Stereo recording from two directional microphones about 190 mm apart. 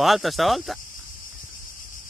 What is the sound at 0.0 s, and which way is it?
Speech, centre (ahead or behind).